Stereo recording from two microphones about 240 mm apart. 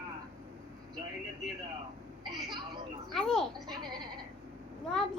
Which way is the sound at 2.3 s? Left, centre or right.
Centre.